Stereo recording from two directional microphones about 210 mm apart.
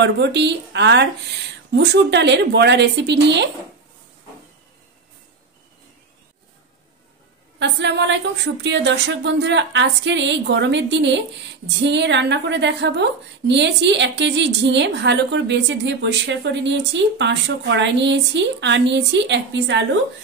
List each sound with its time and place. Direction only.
0.0 s a woman's voice: 55° right (ahead or behind)
7.5 s a woman's voice: 55° right (ahead or behind)